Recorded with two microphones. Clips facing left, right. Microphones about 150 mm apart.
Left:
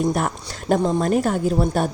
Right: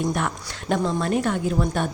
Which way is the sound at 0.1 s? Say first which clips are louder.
Left 3 dB; 40° left (ahead or behind).